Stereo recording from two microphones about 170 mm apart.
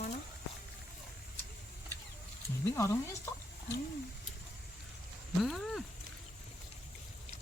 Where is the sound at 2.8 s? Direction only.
20° left (ahead or behind).